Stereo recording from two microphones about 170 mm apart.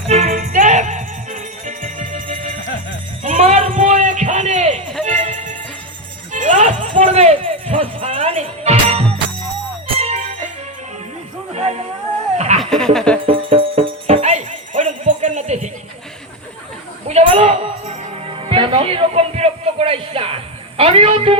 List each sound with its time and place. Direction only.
0.4 s music: 45° right (ahead or behind)
3.2 s a sound: 40° right (ahead or behind)
5.0 s music: 45° right (ahead or behind)
11.5 s music: 40° right (ahead or behind)
12.5 s laughter: 5° left (ahead or behind)
13.2 s music: 30° right (ahead or behind)
17.1 s music: 35° right (ahead or behind)